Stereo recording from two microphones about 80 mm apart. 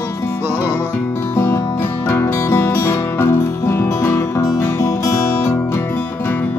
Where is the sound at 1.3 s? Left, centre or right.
Left.